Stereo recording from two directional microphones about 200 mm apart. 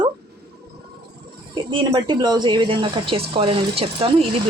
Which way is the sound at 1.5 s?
20° right (ahead or behind).